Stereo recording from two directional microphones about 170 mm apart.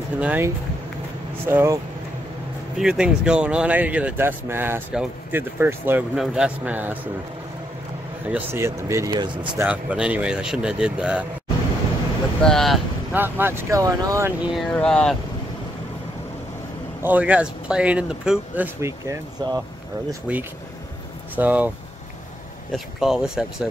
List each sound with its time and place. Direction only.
0.2 s speech: 10° right (ahead or behind)
2.8 s speech: 5° right (ahead or behind)
8.3 s speech: 15° right (ahead or behind)
9.6 s speech: 10° right (ahead or behind)
12.4 s speech: 5° left (ahead or behind)
13.1 s speech: 10° right (ahead or behind)
14.4 s speech: centre (ahead or behind)
17.0 s speech: 10° right (ahead or behind)
20.3 s speech: 5° right (ahead or behind)